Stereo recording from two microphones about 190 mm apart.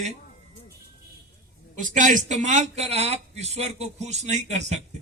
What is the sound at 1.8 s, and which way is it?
A man's voice, 40° right (ahead or behind).